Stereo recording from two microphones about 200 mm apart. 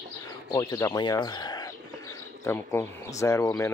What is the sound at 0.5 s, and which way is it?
Speech, 15° left (ahead or behind).